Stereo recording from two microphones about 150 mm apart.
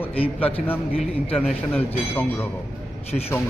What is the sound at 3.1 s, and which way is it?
Speech, 45° left (ahead or behind).